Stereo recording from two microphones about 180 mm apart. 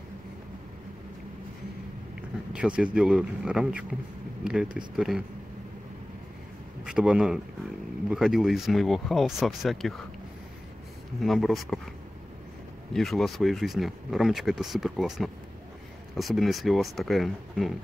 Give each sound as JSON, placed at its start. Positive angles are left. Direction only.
{"t": 2.5, "sound": "speech", "side_deg": -5}
{"t": 6.8, "sound": "speech", "side_deg": -5}
{"t": 11.1, "sound": "speech", "side_deg": 0}
{"t": 12.9, "sound": "speech", "side_deg": 0}